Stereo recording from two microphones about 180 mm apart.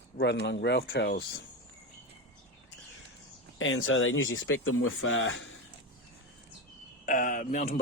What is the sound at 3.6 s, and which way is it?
Speech, 90° left.